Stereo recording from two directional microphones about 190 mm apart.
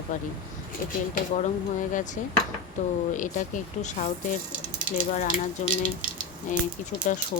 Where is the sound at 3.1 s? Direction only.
40° left (ahead or behind).